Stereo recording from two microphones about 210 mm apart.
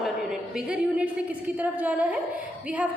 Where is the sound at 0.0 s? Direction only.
5° right (ahead or behind).